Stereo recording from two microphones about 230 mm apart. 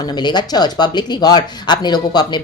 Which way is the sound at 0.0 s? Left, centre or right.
Centre.